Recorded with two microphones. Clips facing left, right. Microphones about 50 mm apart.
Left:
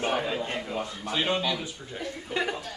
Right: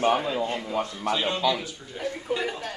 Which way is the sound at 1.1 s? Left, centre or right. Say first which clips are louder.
Right 1 dB; centre.